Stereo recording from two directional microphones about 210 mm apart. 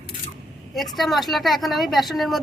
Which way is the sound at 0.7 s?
Centre (ahead or behind).